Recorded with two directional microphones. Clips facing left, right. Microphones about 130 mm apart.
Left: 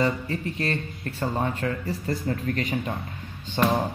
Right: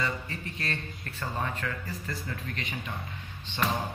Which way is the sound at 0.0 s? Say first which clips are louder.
Left 8 dB; 30° left (ahead or behind).